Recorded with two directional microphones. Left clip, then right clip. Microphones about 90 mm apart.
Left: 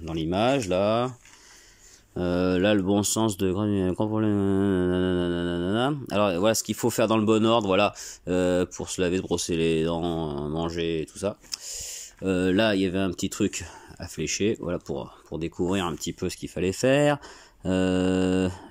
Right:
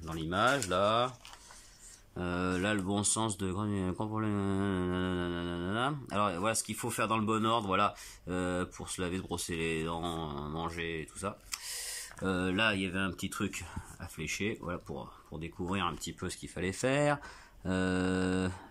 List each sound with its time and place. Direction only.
0.0 s speech: 30° left (ahead or behind)
2.1 s speech: 45° left (ahead or behind)
10.0 s speech: 30° left (ahead or behind)
12.5 s speech: 50° left (ahead or behind); by 18.6 s 30° left (ahead or behind)